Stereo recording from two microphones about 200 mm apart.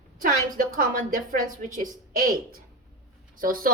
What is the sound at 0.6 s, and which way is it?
Speech, 45° right (ahead or behind).